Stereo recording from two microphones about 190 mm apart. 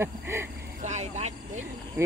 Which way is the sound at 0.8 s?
40° right (ahead or behind).